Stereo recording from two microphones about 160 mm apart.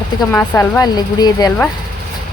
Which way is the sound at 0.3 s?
15° left (ahead or behind).